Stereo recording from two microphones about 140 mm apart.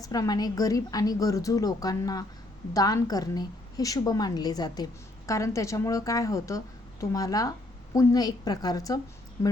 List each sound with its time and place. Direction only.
0.0 s a woman's voice: 25° left (ahead or behind)